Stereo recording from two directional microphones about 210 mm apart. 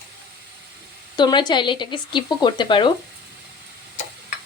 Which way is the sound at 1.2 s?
20° left (ahead or behind).